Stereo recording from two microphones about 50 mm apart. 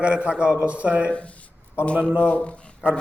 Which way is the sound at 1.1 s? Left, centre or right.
Left.